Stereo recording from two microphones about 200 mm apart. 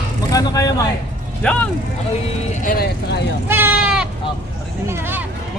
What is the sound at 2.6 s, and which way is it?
Speech, 40° left (ahead or behind).